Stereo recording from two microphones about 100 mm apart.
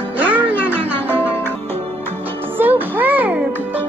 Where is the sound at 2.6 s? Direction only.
20° right (ahead or behind).